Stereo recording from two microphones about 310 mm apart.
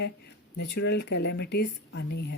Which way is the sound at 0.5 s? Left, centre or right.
Left.